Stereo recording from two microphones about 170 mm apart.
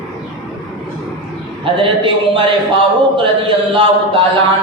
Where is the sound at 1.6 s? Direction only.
30° right (ahead or behind).